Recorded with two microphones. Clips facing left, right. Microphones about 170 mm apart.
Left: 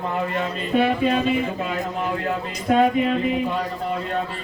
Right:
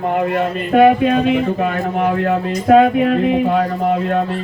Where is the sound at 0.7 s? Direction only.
60° right (ahead or behind).